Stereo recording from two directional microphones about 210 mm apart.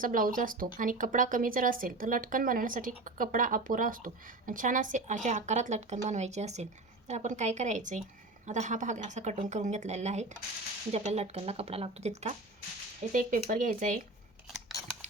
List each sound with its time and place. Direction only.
0.0 s speech: 40° right (ahead or behind)
14.4 s scissors: centre (ahead or behind)